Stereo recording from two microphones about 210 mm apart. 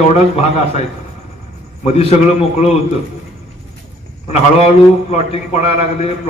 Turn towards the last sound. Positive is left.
turn(degrees=30)  # may be behind; listen again after turning